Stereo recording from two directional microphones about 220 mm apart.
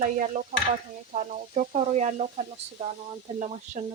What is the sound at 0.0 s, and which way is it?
Speech, 35° right (ahead or behind).